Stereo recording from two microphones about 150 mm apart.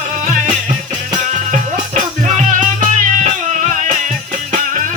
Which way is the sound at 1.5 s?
55° right (ahead or behind).